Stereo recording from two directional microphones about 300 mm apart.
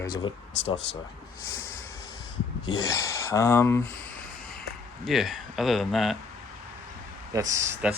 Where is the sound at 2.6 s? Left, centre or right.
Centre.